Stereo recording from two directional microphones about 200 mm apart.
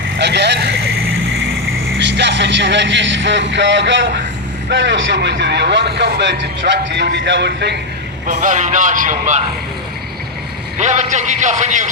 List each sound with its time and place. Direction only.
0.2 s vehicle: 60° right (ahead or behind)
2.0 s a man's voice: 60° right (ahead or behind)
8.3 s speech: 35° right (ahead or behind)
10.8 s speech: 35° right (ahead or behind)